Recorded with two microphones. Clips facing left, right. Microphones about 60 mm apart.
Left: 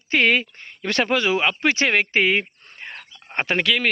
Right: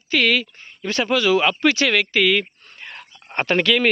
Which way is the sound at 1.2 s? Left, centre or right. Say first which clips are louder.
Right 3 dB; left.